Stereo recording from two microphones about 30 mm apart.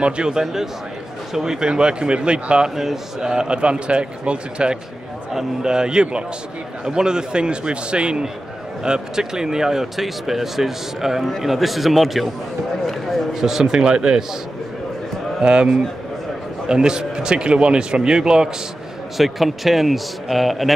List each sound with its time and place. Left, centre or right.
0.3 s speech: centre
1.7 s a man's voice: right
2.7 s speech: centre
3.3 s a man's voice: right
8.8 s a man's voice: right
9.9 s a man's voice: centre
13.3 s a man's voice: centre
15.4 s a man's voice: right
19.1 s a man's voice: centre